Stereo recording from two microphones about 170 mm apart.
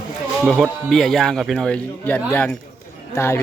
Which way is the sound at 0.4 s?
Centre (ahead or behind).